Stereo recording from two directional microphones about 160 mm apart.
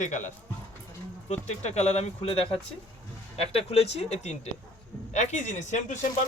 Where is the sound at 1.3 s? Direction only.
45° left (ahead or behind).